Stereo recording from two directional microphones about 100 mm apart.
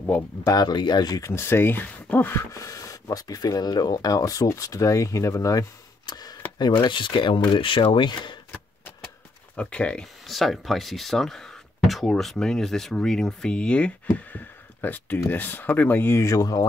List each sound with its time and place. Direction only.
0.0 s speech: 25° left (ahead or behind)
0.5 s speech: 45° left (ahead or behind); by 2.4 s 20° left (ahead or behind)
2.5 s speech: 35° left (ahead or behind); by 8.4 s 50° left (ahead or behind)
9.6 s speech: 10° left (ahead or behind); by 16.6 s 35° left (ahead or behind)